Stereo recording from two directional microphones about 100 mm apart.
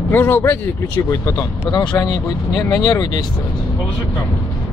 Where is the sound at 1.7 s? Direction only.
45° left (ahead or behind).